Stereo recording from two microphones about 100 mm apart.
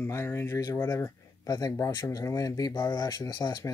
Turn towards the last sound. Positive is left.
turn(degrees=45)  # may be behind; listen again after turning